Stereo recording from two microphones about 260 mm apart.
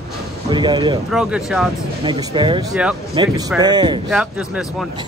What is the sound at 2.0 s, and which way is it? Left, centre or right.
A man's voice, centre.